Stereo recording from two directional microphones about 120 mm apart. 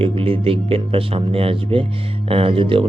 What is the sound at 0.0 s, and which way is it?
Speech, 50° right (ahead or behind).